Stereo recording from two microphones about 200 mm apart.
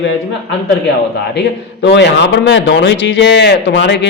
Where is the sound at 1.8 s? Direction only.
60° left (ahead or behind).